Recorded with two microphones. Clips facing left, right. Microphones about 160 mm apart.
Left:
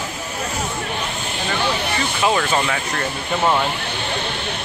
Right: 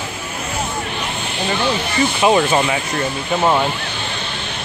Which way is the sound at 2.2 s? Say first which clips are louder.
Right 4 dB; 15° right (ahead or behind).